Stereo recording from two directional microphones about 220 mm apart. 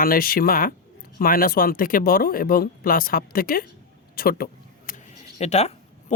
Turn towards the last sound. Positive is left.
turn(degrees=30)  # may be behind; listen again after turning